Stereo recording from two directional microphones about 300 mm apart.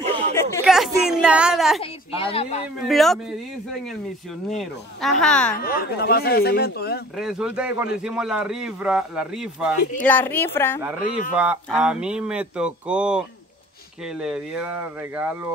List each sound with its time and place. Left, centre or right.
0.0 s chatter: right
0.4 s chatter: centre
1.8 s a woman's voice: centre
2.8 s speech: centre
4.5 s speech: centre
5.6 s speech: left
7.2 s a woman's voice: centre
11.0 s a woman's voice: left
11.3 s speech: centre